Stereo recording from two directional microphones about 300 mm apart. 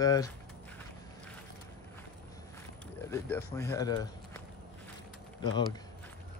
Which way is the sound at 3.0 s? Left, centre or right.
Centre.